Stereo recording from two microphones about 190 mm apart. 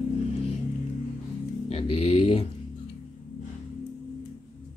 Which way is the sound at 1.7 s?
30° left (ahead or behind).